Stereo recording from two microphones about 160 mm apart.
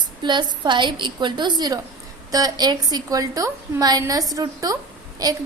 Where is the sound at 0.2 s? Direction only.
30° right (ahead or behind).